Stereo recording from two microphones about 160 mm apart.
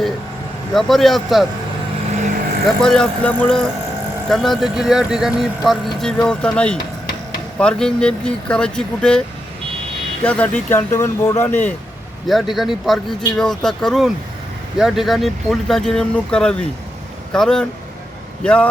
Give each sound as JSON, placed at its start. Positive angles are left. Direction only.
{"t": 0.7, "sound": "speech", "side_deg": 0}
{"t": 2.8, "sound": "speech", "side_deg": 5}
{"t": 10.2, "sound": "speech", "side_deg": 10}
{"t": 12.3, "sound": "speech", "side_deg": 0}